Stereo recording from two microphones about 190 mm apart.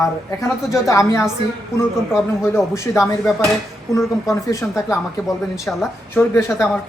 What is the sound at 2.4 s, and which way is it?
A man's voice, 15° left (ahead or behind).